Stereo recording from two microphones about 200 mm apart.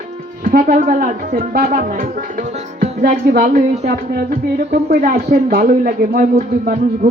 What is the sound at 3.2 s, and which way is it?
Speech, 50° right (ahead or behind).